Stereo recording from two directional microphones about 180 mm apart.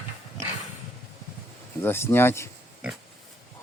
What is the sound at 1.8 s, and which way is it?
Speech, 10° left (ahead or behind).